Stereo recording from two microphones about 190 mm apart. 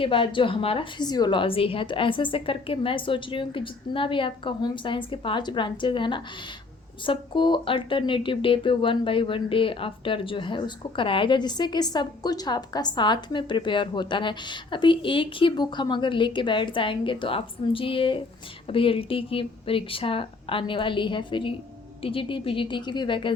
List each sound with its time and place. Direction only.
0.0 s speech: 25° left (ahead or behind)